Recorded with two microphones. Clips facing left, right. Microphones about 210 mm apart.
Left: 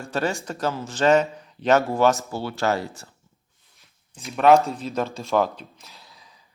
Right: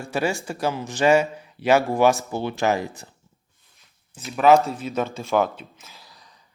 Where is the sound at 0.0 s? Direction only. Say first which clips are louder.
Right 1 dB; 10° right (ahead or behind).